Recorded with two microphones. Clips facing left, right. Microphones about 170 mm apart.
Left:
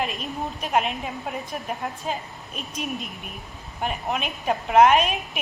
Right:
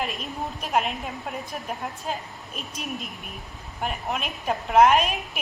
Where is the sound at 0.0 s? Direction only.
Centre (ahead or behind).